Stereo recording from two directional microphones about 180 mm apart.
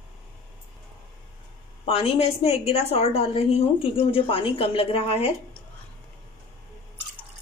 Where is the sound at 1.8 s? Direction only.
35° left (ahead or behind).